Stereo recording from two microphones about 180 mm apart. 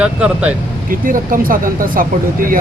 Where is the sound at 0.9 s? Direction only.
50° right (ahead or behind).